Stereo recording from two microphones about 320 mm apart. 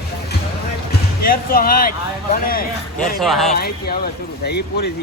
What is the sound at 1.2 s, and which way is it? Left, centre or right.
Music, left.